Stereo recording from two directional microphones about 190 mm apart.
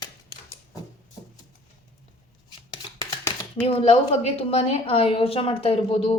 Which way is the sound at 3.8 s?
30° left (ahead or behind).